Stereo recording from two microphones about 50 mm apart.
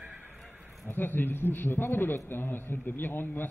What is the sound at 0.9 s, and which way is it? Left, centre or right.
A man's voice, left.